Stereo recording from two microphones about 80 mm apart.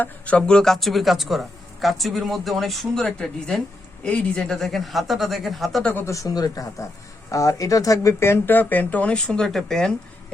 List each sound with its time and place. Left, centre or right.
0.0 s speech: centre
4.5 s speech: centre
5.8 s speech: left
6.1 s speech: left; by 9.9 s centre